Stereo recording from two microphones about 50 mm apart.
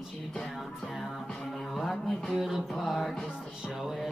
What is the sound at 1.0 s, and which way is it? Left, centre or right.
Music, centre.